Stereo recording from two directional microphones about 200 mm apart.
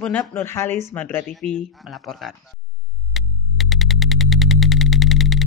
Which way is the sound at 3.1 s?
Centre (ahead or behind).